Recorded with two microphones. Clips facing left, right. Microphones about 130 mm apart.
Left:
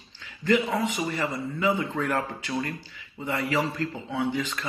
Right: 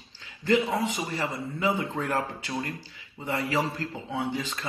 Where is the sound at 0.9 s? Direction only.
25° right (ahead or behind).